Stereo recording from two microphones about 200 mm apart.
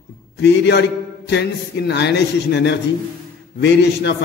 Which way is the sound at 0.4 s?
55° left (ahead or behind).